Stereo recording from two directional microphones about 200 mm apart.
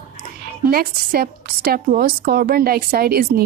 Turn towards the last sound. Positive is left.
turn(degrees=-50)  # may be behind; listen again after turning